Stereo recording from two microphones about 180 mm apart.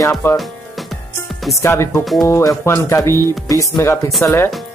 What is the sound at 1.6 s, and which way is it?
Speech, 15° left (ahead or behind).